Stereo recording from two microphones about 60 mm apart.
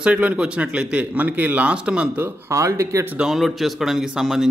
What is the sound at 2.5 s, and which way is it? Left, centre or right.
Speech, right.